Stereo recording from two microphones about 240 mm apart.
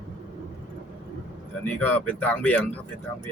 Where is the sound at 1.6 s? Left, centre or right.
Centre.